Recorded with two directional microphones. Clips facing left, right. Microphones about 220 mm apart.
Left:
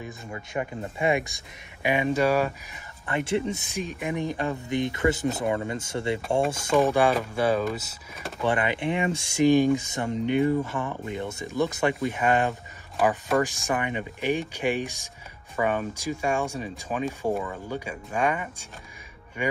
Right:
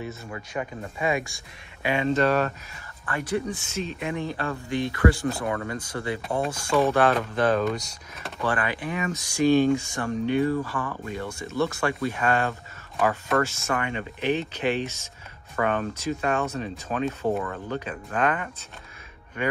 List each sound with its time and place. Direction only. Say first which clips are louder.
0.5 s speech: left 2 dB; 25° left (ahead or behind); by 2.5 s 10° left (ahead or behind)
3.1 s speech: left 2 dB; 25° left (ahead or behind); by 8.3 s 5° left (ahead or behind)
8.4 s speech: left 2 dB; 20° left (ahead or behind)
9.5 s speech: right 1 dB; 15° left (ahead or behind)